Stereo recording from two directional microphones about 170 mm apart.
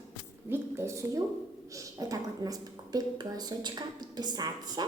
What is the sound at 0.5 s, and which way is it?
A woman's voice, 15° right (ahead or behind).